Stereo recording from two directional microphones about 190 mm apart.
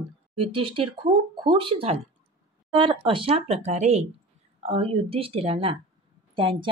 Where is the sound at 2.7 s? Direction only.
25° right (ahead or behind).